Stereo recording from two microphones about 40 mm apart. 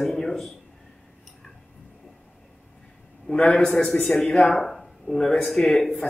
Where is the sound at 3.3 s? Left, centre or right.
Left.